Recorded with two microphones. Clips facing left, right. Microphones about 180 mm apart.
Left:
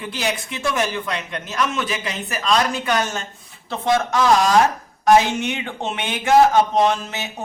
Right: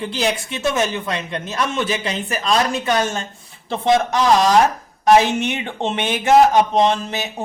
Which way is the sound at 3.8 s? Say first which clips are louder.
Right 3 dB; 20° right (ahead or behind).